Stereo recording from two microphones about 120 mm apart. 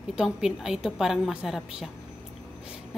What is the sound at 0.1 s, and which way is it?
A woman's voice, 5° right (ahead or behind).